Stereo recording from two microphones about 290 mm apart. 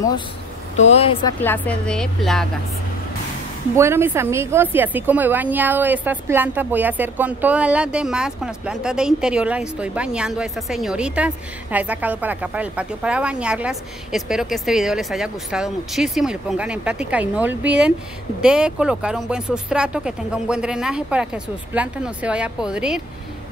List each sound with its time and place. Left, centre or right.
0.7 s speech: left
1.4 s a woman's voice: centre
3.7 s a woman's voice: centre